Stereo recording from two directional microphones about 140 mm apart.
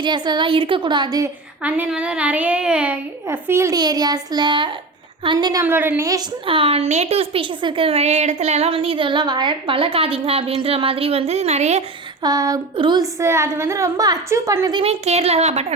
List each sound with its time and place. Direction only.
0.0 s a woman's voice: 35° right (ahead or behind)
1.6 s a child's voice: 10° right (ahead or behind); by 5.6 s 30° right (ahead or behind)
5.6 s a child's voice: 15° right (ahead or behind)
6.4 s speech: 40° right (ahead or behind)
12.2 s a woman's voice: 25° right (ahead or behind)
14.7 s speech: 40° right (ahead or behind)